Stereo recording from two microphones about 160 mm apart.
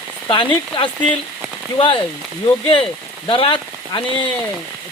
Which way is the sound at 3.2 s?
35° left (ahead or behind).